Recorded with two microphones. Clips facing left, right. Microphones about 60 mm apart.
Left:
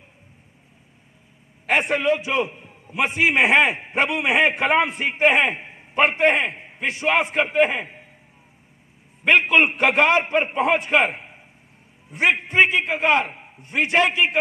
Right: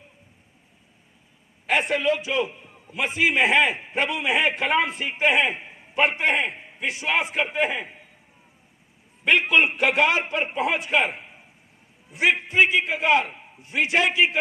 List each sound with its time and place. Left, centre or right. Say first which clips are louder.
1.7 s a man's voice: left 2 dB; left
9.2 s a man's voice: left 3 dB; left